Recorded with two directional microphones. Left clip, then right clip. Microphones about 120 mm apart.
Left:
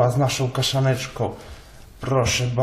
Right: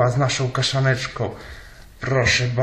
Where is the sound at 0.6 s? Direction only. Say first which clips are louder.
Right 1 dB; centre (ahead or behind).